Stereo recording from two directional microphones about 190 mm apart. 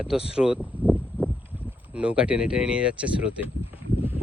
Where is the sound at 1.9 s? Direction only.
5° right (ahead or behind).